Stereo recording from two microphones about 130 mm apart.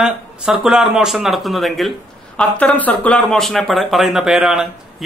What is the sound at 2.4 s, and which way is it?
Speech, 10° left (ahead or behind).